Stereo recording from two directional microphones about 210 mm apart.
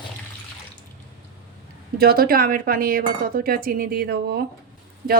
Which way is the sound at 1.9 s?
45° right (ahead or behind).